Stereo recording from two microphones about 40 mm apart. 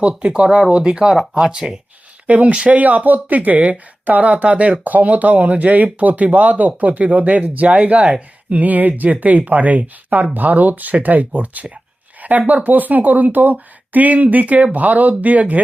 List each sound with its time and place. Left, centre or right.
0.2 s speech: right
2.2 s speech: right
8.6 s speech: right